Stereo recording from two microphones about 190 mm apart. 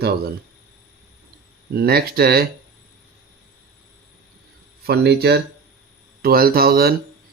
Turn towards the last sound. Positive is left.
turn(degrees=-55)  # may be behind; listen again after turning